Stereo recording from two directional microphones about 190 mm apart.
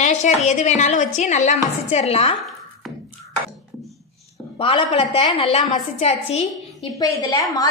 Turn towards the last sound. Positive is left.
turn(degrees=20)  # may be behind; listen again after turning